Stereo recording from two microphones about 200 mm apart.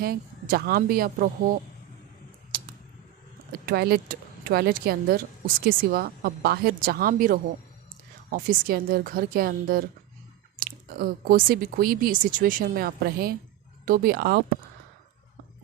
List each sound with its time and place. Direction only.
0.0 s speech: 50° right (ahead or behind)
2.5 s a sound: 45° right (ahead or behind)
3.7 s speech: 50° right (ahead or behind)